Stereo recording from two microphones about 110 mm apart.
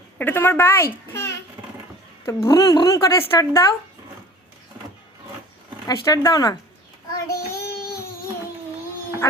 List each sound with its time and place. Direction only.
0.2 s a child's voice: 20° left (ahead or behind)
5.8 s speech: 35° left (ahead or behind)
7.3 s child singing: 30° left (ahead or behind)